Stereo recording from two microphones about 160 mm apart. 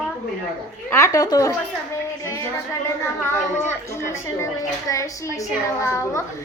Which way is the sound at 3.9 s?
15° left (ahead or behind).